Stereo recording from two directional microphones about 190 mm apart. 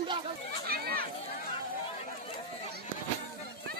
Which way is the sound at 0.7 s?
50° right (ahead or behind).